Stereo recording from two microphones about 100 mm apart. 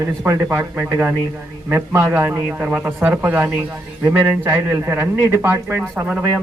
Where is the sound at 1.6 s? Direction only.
20° right (ahead or behind).